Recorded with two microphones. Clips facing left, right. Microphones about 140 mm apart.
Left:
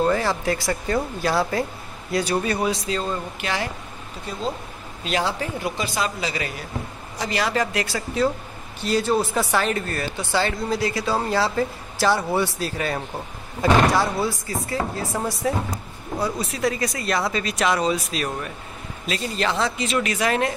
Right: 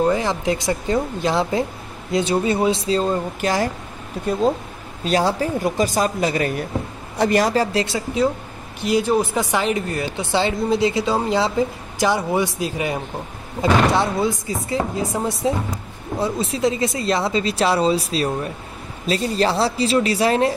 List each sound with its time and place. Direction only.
0.0 s speech: 15° right (ahead or behind); by 3.7 s 40° right (ahead or behind)
5.0 s a woman's voice: 40° right (ahead or behind); by 13.0 s 15° right (ahead or behind)
14.1 s a woman's voice: 20° right (ahead or behind)